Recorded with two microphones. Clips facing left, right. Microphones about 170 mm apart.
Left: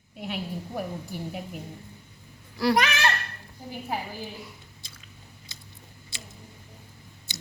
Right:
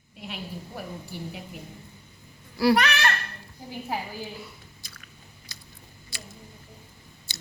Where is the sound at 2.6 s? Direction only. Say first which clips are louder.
Right 3 dB; 5° right (ahead or behind).